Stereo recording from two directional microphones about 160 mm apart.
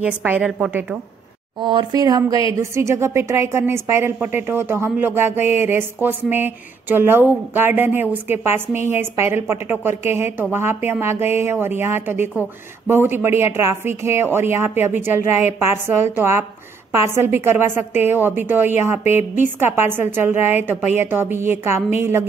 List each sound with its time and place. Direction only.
0.0 s a woman's voice: 10° right (ahead or behind)
1.6 s a woman's voice: 30° right (ahead or behind)